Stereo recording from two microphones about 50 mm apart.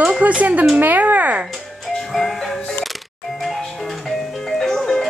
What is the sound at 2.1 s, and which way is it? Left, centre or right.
Music, centre.